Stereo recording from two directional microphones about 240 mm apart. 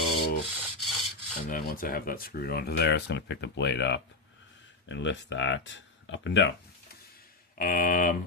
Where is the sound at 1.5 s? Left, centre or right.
Left.